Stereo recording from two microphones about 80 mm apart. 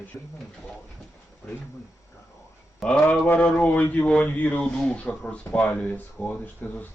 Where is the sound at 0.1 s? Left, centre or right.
Centre.